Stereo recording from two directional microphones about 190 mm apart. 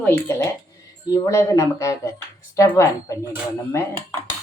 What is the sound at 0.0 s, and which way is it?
Speech, 15° left (ahead or behind).